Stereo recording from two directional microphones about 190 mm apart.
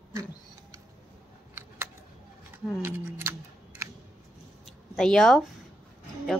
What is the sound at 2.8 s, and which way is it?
Speech, 10° right (ahead or behind).